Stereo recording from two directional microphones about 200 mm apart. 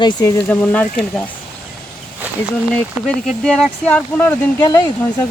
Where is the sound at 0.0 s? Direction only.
20° left (ahead or behind).